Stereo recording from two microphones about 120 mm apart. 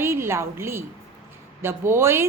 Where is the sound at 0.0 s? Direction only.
20° right (ahead or behind).